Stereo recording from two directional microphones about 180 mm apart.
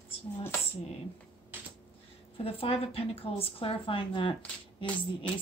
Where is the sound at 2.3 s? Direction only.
35° left (ahead or behind).